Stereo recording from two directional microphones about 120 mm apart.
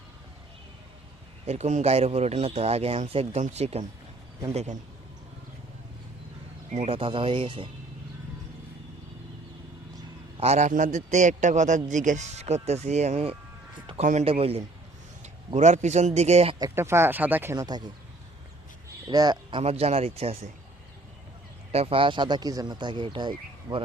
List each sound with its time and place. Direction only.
1.5 s a man's voice: 70° right (ahead or behind)
4.5 s a man's voice: 75° right (ahead or behind)
6.7 s speech: 90° right
6.9 s speech: 50° right (ahead or behind)
10.3 s a man's voice: 60° right (ahead or behind)
14.0 s a man's voice: 90° right
14.3 s a man's voice: 55° right (ahead or behind)
15.5 s a man's voice: 75° right (ahead or behind); by 16.6 s 60° right (ahead or behind)
16.7 s speech: 20° right (ahead or behind)
17.5 s speech: 35° right (ahead or behind)
19.1 s speech: 35° right (ahead or behind)
19.6 s a man's voice: 55° right (ahead or behind)
21.7 s speech: 55° right (ahead or behind)